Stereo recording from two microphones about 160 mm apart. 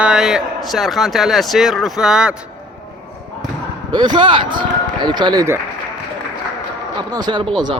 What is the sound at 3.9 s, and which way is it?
Speech, 30° right (ahead or behind).